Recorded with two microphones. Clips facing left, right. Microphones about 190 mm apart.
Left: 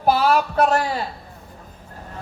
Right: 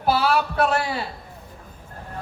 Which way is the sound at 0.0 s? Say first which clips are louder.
Left 3 dB; 45° left (ahead or behind).